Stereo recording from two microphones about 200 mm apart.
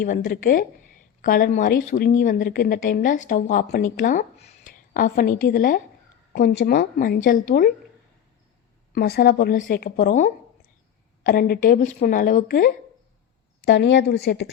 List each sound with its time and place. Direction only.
0.0 s speech: 40° left (ahead or behind)
9.0 s speech: 50° left (ahead or behind)
13.7 s a woman's voice: 60° left (ahead or behind)